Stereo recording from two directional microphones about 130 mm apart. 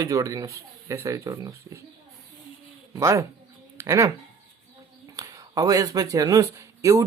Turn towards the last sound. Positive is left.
turn(degrees=-25)  # may be behind; listen again after turning